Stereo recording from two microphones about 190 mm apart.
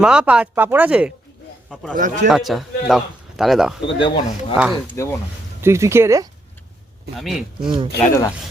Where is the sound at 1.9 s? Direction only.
45° right (ahead or behind).